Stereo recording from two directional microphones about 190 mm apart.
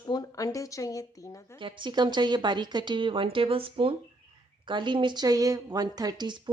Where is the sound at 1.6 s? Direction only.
25° right (ahead or behind).